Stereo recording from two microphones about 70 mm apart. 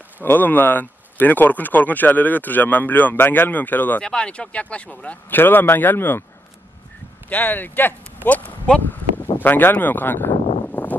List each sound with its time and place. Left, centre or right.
0.2 s speech: left
4.0 s speech: centre
5.4 s speech: left
7.2 s speech: left
8.9 s a sound: left